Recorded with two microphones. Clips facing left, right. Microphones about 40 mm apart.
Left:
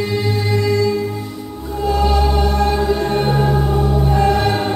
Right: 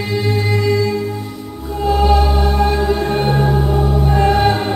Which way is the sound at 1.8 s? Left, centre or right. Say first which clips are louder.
Right 2 dB; centre.